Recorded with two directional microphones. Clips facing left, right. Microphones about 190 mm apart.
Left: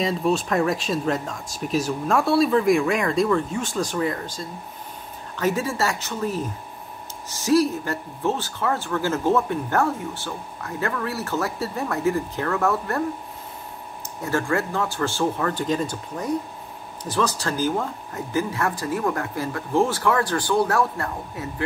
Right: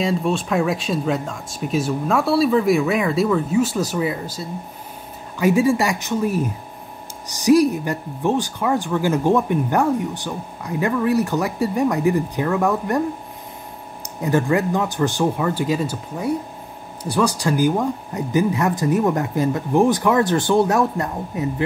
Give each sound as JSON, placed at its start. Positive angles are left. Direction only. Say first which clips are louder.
{"t": 0.0, "sound": "speech", "louder": "right 1 dB", "side_deg": 0}
{"t": 14.2, "sound": "speech", "louder": "right 5 dB", "side_deg": -15}